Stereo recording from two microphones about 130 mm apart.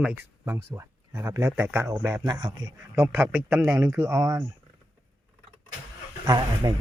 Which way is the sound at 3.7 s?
20° right (ahead or behind).